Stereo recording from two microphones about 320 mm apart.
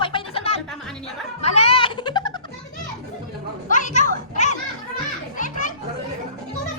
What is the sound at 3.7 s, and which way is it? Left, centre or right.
Children playing, left.